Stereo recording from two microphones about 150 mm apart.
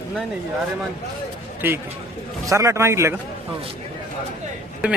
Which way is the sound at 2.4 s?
20° right (ahead or behind).